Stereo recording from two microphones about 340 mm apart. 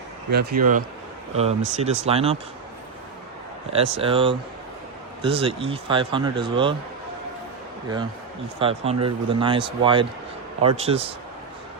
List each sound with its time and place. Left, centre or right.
0.3 s speech: right
3.7 s speech: centre
8.5 s speech: centre